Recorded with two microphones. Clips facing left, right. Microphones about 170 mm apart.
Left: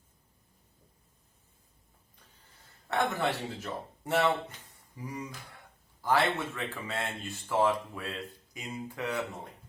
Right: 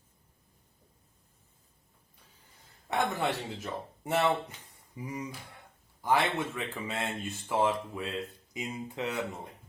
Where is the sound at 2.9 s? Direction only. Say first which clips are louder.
Even; 15° right (ahead or behind).